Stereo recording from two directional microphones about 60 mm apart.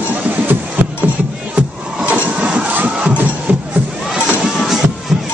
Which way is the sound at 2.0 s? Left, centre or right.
Right.